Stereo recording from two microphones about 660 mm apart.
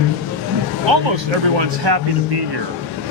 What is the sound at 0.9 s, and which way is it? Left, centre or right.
Speech, right.